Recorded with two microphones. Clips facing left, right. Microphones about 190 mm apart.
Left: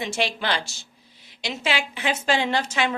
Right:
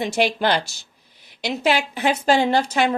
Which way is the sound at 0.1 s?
55° right (ahead or behind).